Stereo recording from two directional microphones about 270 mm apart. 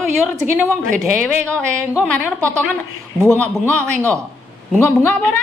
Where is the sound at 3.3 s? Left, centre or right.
Centre.